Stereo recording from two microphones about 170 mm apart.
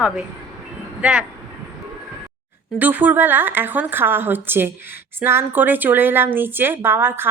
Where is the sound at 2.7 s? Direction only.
10° right (ahead or behind).